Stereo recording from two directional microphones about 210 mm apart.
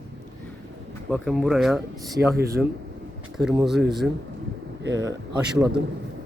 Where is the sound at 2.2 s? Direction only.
50° right (ahead or behind).